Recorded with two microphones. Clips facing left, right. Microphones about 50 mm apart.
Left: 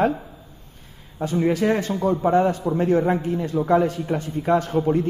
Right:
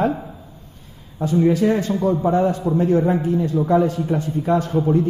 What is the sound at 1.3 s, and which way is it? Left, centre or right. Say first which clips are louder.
A man's voice: right 3 dB; left.